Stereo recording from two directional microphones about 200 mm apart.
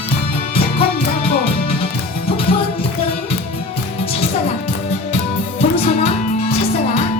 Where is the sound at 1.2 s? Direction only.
30° left (ahead or behind).